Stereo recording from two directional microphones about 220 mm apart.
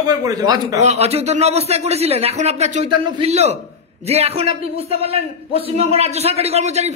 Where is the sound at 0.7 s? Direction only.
30° right (ahead or behind).